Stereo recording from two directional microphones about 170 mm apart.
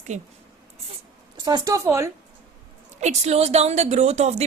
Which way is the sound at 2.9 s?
40° right (ahead or behind).